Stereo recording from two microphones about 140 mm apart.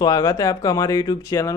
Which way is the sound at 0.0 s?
25° left (ahead or behind).